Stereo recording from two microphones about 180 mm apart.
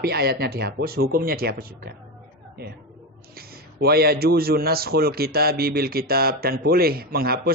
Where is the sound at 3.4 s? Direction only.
60° right (ahead or behind).